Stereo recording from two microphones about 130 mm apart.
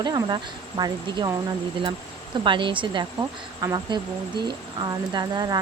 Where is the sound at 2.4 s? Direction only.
40° right (ahead or behind).